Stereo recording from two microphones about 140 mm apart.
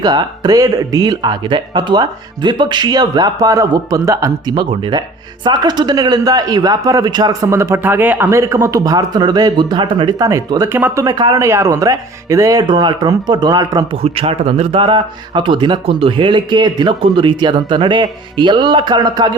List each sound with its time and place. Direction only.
0.0 s speech: 30° right (ahead or behind)
10.8 s speech: 15° right (ahead or behind)
11.0 s speech: 30° right (ahead or behind)
13.9 s speech: 40° right (ahead or behind)